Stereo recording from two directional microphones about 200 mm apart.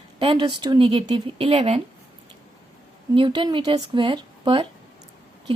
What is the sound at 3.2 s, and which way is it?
A woman's voice, 25° right (ahead or behind).